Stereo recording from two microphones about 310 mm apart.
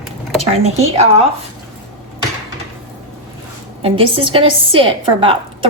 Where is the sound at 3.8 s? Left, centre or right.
Centre.